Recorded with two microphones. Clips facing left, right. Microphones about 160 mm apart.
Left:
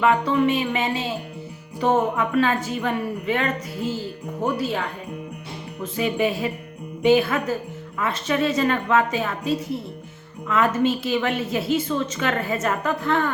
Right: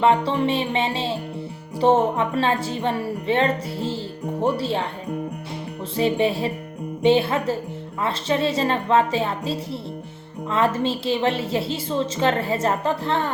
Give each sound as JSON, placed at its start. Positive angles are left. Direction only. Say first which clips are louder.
{"t": 0.0, "sound": "a woman's voice", "louder": "even", "side_deg": -30}